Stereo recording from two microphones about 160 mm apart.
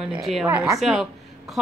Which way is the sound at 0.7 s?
5° right (ahead or behind).